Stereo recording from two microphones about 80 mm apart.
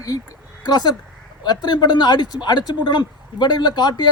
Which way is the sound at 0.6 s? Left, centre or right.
Left.